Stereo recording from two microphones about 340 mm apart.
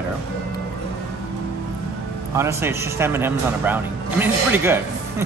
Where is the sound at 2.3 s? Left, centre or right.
Centre.